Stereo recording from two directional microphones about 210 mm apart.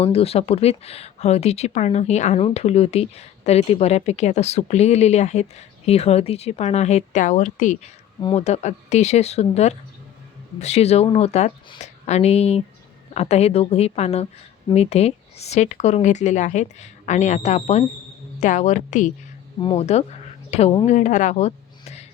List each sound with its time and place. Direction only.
0.0 s a woman's voice: 30° left (ahead or behind)